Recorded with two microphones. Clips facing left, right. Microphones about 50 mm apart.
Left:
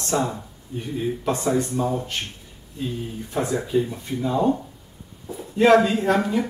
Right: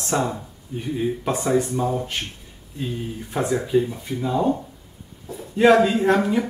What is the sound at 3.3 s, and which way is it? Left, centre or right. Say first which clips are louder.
Speech: right 2 dB; centre.